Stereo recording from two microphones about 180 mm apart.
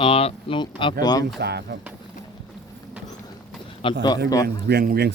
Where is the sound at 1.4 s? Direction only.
65° right (ahead or behind).